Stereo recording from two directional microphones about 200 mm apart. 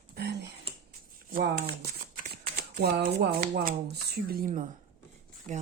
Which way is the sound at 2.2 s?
40° right (ahead or behind).